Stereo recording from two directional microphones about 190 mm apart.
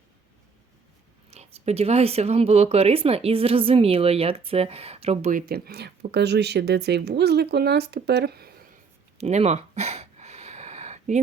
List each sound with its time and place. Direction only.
1.3 s speech: 30° right (ahead or behind)
5.5 s a woman's voice: 55° right (ahead or behind)
9.1 s a sound: 35° right (ahead or behind)